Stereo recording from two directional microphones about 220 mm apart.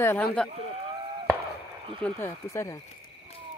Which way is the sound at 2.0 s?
10° left (ahead or behind).